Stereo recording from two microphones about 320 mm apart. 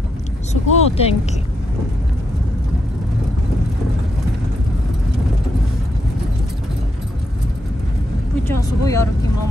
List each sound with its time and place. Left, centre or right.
0.5 s speech: centre
8.5 s speech: centre